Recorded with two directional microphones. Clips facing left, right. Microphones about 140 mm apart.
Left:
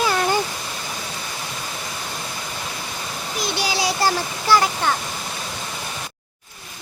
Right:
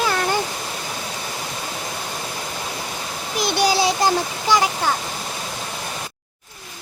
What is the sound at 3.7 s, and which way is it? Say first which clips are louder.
A child's voice: right 3 dB; 20° right (ahead or behind).